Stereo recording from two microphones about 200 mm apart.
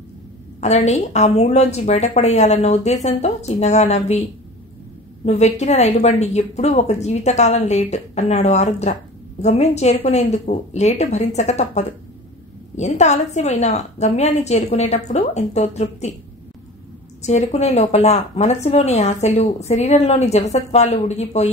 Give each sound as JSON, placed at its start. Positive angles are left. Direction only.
{"t": 0.6, "sound": "a woman's voice", "side_deg": 35}
{"t": 5.2, "sound": "a woman's voice", "side_deg": 35}
{"t": 17.2, "sound": "a woman's voice", "side_deg": 35}